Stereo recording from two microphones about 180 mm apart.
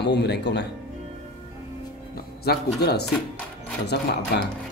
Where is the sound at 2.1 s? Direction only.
60° left (ahead or behind).